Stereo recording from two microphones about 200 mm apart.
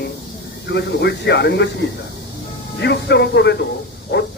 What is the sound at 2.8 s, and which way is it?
Speech, 55° left (ahead or behind).